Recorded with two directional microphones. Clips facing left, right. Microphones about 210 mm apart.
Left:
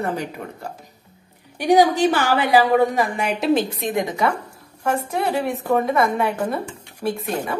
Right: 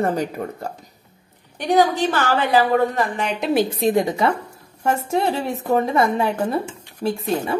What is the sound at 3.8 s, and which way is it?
Speech, 30° right (ahead or behind).